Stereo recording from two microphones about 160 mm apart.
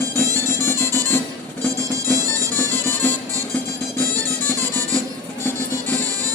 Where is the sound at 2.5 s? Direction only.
15° left (ahead or behind).